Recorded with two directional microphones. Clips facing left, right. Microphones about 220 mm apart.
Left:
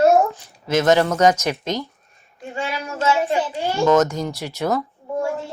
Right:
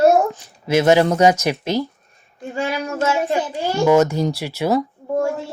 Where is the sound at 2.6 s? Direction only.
45° right (ahead or behind).